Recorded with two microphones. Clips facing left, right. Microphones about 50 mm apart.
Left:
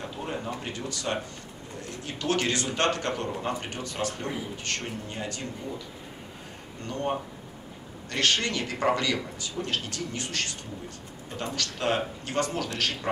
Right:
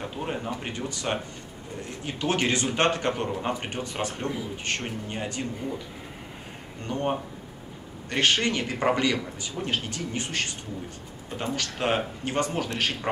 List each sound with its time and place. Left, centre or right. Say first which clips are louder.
0.2 s speech: right 2 dB; right
6.9 s speech: right 2 dB; right
11.5 s speech: right 1 dB; right